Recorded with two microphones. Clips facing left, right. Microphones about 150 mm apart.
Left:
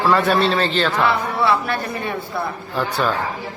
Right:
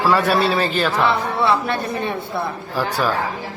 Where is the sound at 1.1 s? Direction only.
20° right (ahead or behind).